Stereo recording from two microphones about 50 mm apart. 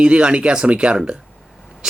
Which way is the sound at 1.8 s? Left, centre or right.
Centre.